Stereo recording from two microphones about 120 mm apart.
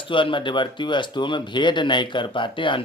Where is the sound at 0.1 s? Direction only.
45° left (ahead or behind).